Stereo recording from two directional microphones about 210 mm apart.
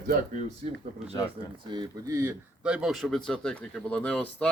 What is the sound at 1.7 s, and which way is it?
Speech, 20° right (ahead or behind).